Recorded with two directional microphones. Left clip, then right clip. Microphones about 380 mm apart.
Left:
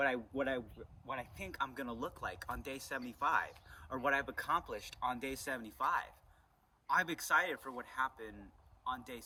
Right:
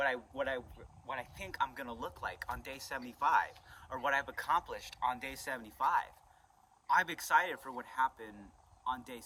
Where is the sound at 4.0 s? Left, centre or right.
Centre.